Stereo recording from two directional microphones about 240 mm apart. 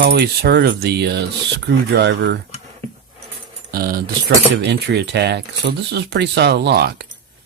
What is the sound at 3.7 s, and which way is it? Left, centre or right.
A man's voice, right.